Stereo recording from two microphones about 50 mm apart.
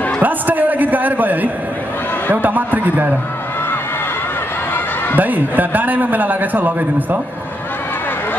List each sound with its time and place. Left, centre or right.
0.2 s a sound: right
2.4 s a man's voice: right
5.1 s a man's voice: right